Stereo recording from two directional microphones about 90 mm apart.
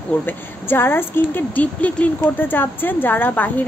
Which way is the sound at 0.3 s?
25° left (ahead or behind).